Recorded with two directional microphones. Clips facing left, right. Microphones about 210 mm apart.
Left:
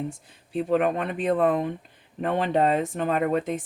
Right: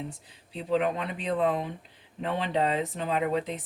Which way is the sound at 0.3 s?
50° left (ahead or behind).